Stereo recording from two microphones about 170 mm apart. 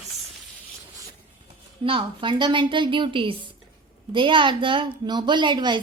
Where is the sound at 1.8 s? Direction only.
30° right (ahead or behind).